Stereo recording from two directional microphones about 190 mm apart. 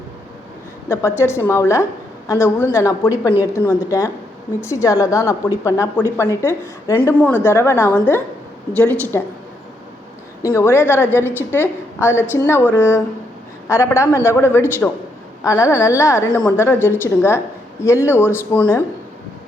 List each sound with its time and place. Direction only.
0.9 s a woman's voice: 15° left (ahead or behind)
10.4 s a woman's voice: 15° left (ahead or behind)